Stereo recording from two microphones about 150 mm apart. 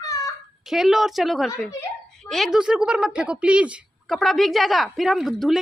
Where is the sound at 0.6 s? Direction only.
Centre (ahead or behind).